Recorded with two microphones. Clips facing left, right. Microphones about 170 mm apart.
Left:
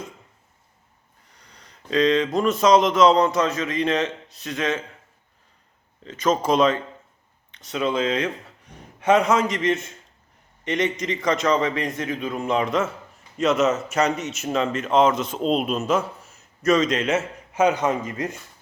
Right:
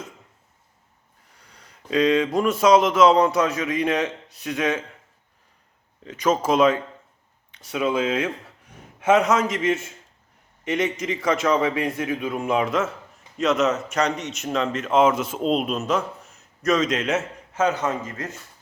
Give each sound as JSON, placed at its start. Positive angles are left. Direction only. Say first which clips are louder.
{"t": 1.4, "sound": "speech", "louder": "even", "side_deg": -5}
{"t": 6.1, "sound": "a man's voice", "louder": "even", "side_deg": -10}
{"t": 17.5, "sound": "a man's voice", "louder": "left 3 dB", "side_deg": 15}